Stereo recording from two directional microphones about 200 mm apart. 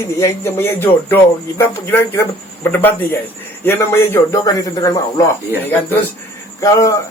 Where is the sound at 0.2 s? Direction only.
10° left (ahead or behind).